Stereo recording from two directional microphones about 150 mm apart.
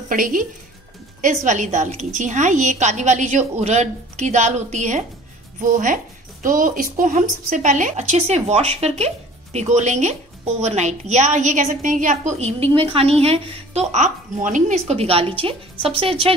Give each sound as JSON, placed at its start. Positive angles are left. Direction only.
{"t": 0.1, "sound": "a woman's voice", "side_deg": -65}